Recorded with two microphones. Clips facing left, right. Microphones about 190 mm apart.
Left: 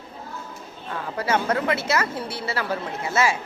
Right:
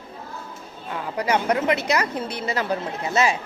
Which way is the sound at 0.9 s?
15° right (ahead or behind).